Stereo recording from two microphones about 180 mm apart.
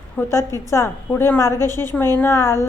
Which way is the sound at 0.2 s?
15° left (ahead or behind).